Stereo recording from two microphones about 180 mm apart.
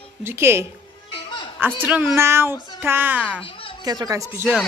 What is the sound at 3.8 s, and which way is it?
Speech, 20° right (ahead or behind).